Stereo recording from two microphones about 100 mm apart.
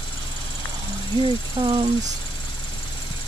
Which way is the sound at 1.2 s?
55° right (ahead or behind).